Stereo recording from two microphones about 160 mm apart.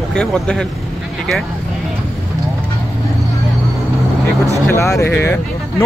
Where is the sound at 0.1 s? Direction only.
5° left (ahead or behind).